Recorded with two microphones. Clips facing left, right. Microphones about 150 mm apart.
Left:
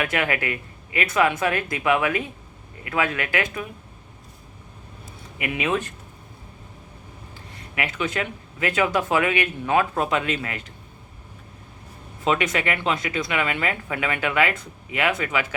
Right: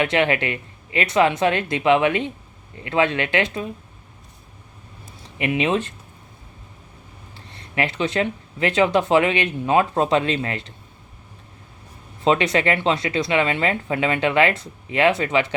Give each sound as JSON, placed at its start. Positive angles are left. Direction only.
{"t": 0.0, "sound": "speech", "side_deg": -25}
{"t": 5.4, "sound": "speech", "side_deg": -25}
{"t": 7.3, "sound": "speech", "side_deg": -30}
{"t": 12.2, "sound": "speech", "side_deg": -30}